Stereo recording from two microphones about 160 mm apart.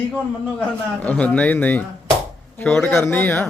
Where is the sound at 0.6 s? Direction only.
10° left (ahead or behind).